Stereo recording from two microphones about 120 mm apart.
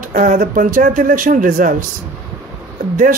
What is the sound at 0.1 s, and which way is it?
A man's voice, 90° right.